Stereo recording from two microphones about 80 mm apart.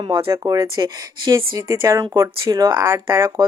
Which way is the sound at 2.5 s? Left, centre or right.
Right.